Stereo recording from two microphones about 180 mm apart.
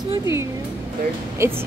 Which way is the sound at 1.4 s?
15° right (ahead or behind).